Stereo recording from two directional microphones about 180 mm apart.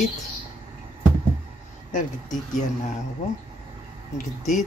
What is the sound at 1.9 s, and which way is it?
Speech, 45° left (ahead or behind).